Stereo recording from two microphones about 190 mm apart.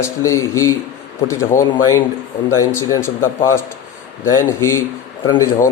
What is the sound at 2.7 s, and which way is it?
Speech, 15° left (ahead or behind).